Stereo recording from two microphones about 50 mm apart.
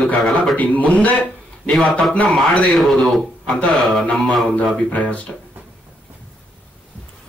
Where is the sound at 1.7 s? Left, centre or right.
Centre.